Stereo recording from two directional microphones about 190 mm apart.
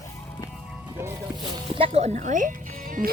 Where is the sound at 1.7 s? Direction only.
30° right (ahead or behind).